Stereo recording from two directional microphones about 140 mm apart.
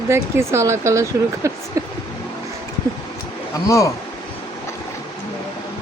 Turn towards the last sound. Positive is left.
turn(degrees=20)  # may be behind; listen again after turning